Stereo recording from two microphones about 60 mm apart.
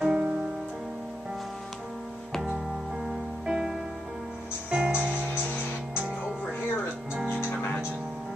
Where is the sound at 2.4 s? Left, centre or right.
Centre.